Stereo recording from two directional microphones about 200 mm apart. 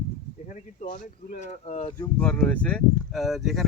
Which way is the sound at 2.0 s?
5° left (ahead or behind).